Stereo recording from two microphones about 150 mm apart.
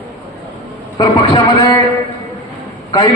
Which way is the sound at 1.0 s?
30° left (ahead or behind).